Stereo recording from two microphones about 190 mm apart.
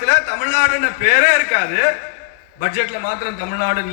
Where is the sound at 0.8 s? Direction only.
45° right (ahead or behind).